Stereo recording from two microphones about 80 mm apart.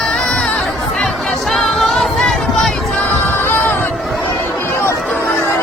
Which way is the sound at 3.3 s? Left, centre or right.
Left.